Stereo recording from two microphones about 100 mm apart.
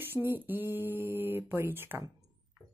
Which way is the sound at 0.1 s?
20° right (ahead or behind).